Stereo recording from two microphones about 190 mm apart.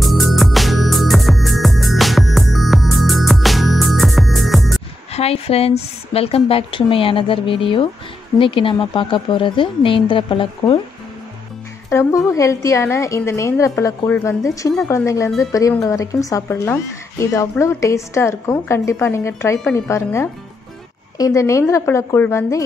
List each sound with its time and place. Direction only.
0.0 s music: centre (ahead or behind)
5.1 s a woman's voice: 30° left (ahead or behind)
11.9 s speech: 15° left (ahead or behind)